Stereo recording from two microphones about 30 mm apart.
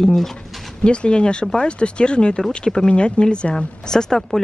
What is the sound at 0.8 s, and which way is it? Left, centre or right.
Speech, left.